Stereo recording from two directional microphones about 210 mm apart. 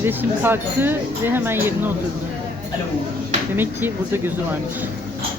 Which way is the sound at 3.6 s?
10° right (ahead or behind).